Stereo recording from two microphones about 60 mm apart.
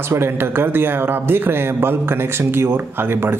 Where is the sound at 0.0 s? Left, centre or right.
Right.